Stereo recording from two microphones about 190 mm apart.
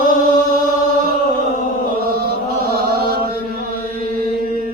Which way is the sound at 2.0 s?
55° right (ahead or behind).